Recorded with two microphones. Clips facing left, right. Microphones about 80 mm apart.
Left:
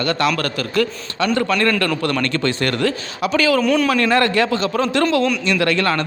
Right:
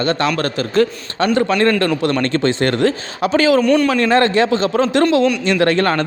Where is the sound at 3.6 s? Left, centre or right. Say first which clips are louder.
Right 3 dB; centre.